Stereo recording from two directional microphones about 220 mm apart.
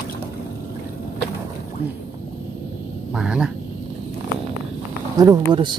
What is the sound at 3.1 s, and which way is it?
Speech, 5° right (ahead or behind).